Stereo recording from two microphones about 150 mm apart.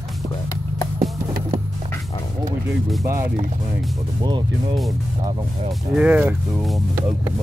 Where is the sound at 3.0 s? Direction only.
20° right (ahead or behind).